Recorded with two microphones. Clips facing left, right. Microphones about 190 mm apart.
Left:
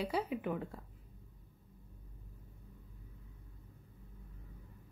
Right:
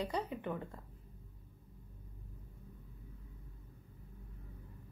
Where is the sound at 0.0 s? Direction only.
5° left (ahead or behind).